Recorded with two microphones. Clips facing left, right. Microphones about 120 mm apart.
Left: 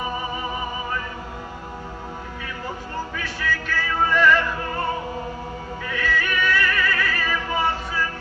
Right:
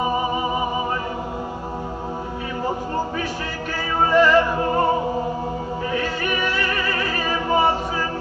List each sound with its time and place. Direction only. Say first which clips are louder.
0.0 s music: right 6 dB; 25° right (ahead or behind)
3.7 s music: right 4 dB; 30° right (ahead or behind)